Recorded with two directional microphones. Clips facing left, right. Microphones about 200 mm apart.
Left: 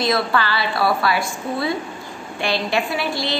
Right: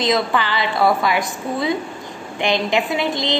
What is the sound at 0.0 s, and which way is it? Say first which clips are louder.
A woman's voice: right 1 dB; 20° right (ahead or behind).